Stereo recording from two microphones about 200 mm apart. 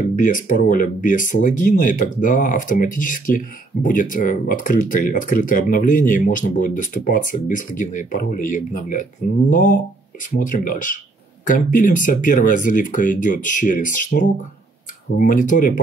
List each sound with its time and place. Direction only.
0.2 s speech: 40° left (ahead or behind)